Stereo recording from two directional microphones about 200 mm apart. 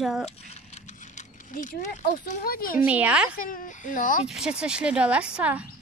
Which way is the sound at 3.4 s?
40° left (ahead or behind).